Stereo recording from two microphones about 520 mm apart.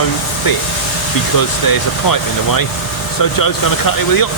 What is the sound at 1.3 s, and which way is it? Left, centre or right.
Speech, left.